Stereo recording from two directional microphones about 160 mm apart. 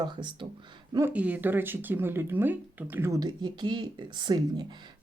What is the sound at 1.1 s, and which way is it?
Speech, 10° right (ahead or behind).